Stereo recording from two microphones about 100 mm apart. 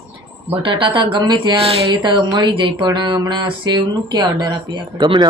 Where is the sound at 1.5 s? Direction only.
80° right.